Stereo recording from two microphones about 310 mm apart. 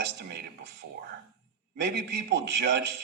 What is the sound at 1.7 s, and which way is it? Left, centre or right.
Speech, right.